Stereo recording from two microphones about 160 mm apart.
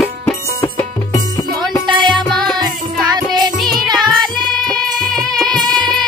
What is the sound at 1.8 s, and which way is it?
Music, 30° right (ahead or behind).